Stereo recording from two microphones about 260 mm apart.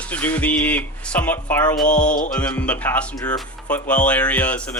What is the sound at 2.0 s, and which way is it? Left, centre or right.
Music, left.